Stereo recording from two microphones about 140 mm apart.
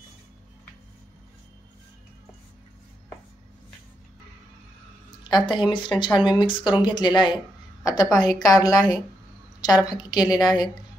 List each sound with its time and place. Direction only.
5.3 s a woman's voice: 35° left (ahead or behind)